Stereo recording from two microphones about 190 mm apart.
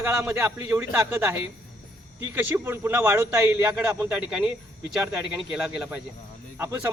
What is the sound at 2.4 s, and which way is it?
Speech, 10° right (ahead or behind).